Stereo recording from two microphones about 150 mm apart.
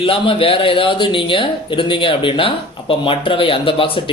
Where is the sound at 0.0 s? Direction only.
35° left (ahead or behind).